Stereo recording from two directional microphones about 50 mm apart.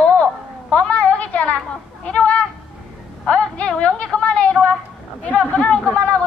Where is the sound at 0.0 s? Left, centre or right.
Left.